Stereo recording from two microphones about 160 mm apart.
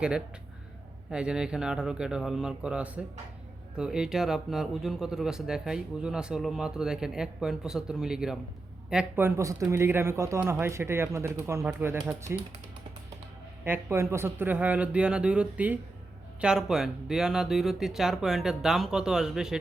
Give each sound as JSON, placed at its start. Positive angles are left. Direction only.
{"t": 1.1, "sound": "speech", "side_deg": -5}
{"t": 13.7, "sound": "speech", "side_deg": -15}